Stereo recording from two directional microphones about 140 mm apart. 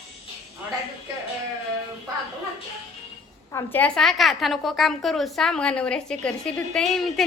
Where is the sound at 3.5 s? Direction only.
15° left (ahead or behind).